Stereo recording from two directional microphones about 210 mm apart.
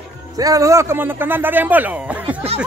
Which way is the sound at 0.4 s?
15° right (ahead or behind).